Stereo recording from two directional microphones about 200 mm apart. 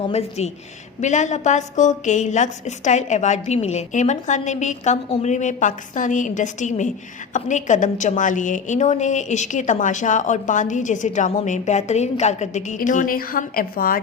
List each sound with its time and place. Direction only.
0.1 s a woman's voice: 35° left (ahead or behind)